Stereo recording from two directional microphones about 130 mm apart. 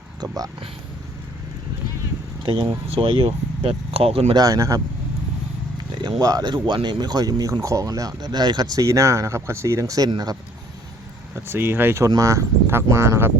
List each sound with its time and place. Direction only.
0.2 s speech: 25° right (ahead or behind)
2.4 s speech: 35° right (ahead or behind)
4.4 s speech: 25° right (ahead or behind)
5.7 s speech: 35° right (ahead or behind)
11.4 s speech: 15° right (ahead or behind)